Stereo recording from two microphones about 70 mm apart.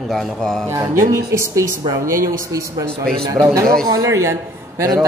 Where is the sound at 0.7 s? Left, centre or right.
Right.